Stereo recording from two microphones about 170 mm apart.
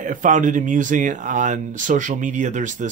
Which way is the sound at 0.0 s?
50° right (ahead or behind).